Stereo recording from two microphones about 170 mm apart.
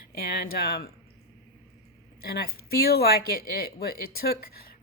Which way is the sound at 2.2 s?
65° left (ahead or behind).